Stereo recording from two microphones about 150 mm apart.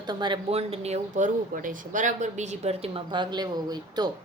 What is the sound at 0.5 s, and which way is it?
Speech, 45° right (ahead or behind).